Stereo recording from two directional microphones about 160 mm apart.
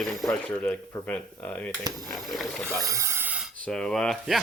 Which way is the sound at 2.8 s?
20° right (ahead or behind).